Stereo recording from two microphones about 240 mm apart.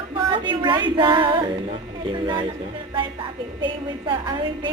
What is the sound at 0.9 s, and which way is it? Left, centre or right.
A woman's voice, right.